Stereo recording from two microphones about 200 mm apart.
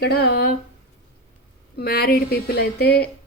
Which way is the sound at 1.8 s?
50° left (ahead or behind).